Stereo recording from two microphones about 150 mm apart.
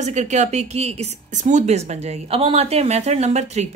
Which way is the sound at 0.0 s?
50° right (ahead or behind).